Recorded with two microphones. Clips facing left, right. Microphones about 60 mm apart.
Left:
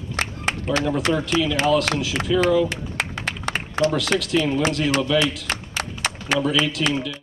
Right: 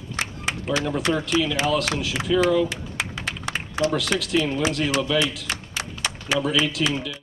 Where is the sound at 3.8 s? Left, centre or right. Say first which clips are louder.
Left 2 dB; centre.